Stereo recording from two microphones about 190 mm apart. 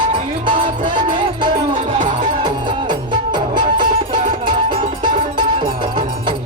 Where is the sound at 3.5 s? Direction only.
25° right (ahead or behind).